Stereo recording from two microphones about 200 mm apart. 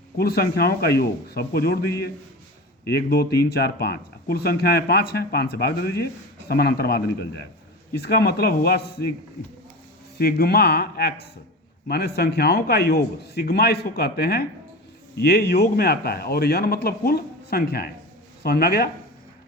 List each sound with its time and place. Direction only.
0.2 s speech: 50° left (ahead or behind)
10.2 s speech: 50° left (ahead or behind)